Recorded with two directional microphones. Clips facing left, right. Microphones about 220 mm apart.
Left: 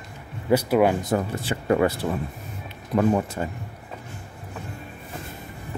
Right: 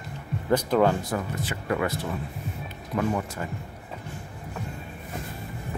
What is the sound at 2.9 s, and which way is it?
Speech, 35° left (ahead or behind).